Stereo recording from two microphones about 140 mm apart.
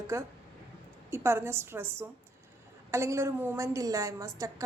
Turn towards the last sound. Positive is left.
turn(degrees=-25)  # may be behind; listen again after turning